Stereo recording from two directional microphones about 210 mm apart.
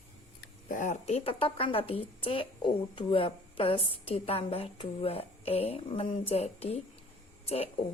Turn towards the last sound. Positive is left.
turn(degrees=30)  # may be behind; listen again after turning